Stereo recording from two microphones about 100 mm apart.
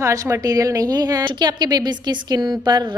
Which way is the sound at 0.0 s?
30° right (ahead or behind).